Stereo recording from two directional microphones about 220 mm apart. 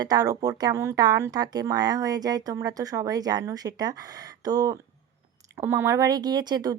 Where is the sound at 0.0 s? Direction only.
15° right (ahead or behind).